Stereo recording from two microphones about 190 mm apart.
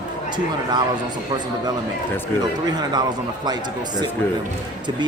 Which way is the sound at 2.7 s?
20° right (ahead or behind).